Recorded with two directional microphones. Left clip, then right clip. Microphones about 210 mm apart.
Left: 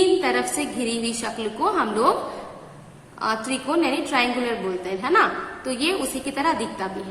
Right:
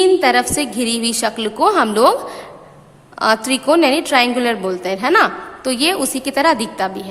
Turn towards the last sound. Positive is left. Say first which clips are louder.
# right 8 dB
turn(degrees=-50)  # may be behind; listen again after turning